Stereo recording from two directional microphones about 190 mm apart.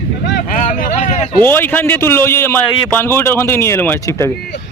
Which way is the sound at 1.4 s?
10° left (ahead or behind).